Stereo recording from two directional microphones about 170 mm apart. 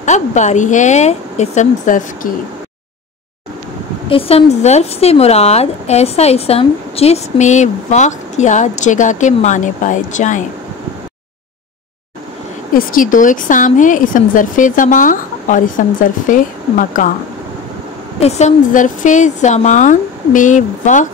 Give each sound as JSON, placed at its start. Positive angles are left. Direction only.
{"t": 0.0, "sound": "speech", "side_deg": 45}
{"t": 4.1, "sound": "a woman's voice", "side_deg": 35}
{"t": 12.7, "sound": "speech", "side_deg": 55}
{"t": 18.2, "sound": "speech", "side_deg": 45}